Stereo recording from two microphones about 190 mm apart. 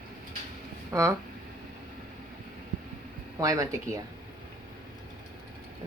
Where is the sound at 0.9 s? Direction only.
15° right (ahead or behind).